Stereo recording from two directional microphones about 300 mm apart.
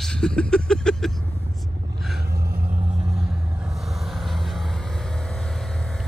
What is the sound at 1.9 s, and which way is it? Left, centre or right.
Vehicle, centre.